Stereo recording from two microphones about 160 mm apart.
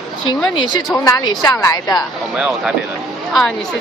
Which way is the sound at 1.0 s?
20° left (ahead or behind).